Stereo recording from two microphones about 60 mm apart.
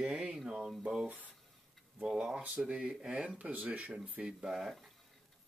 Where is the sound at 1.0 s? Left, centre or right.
Right.